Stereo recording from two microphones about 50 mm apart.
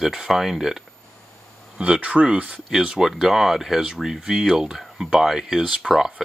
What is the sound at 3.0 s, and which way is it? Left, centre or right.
Speech, centre.